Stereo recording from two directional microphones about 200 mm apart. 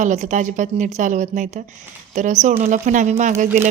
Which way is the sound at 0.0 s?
35° right (ahead or behind).